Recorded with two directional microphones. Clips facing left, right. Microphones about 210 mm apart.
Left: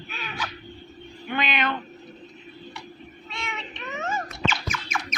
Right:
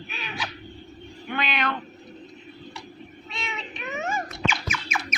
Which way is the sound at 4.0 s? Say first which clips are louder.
Even; 10° right (ahead or behind).